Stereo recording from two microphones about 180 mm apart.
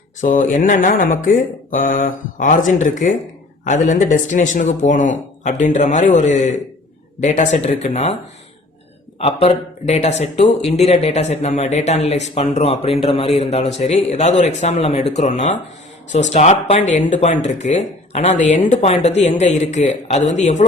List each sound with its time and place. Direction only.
0.2 s speech: 45° left (ahead or behind)